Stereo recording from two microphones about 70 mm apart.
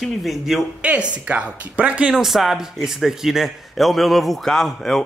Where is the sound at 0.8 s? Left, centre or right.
Centre.